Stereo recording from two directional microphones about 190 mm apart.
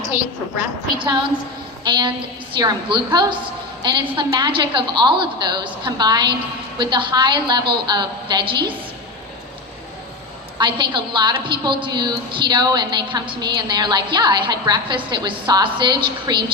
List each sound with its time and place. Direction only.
0.9 s a woman's voice: 20° right (ahead or behind)
10.6 s a woman's voice: 25° right (ahead or behind)